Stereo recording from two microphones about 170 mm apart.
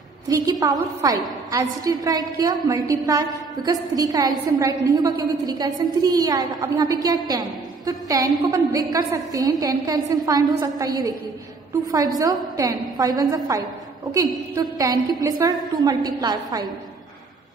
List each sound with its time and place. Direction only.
0.3 s a woman's voice: 20° right (ahead or behind)